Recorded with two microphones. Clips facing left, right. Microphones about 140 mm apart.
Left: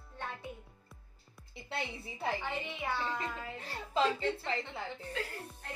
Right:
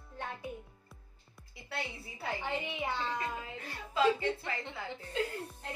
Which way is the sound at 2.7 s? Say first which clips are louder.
Right 1 dB; 20° right (ahead or behind).